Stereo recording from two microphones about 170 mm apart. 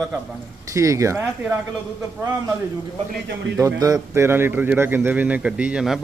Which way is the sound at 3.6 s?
20° right (ahead or behind).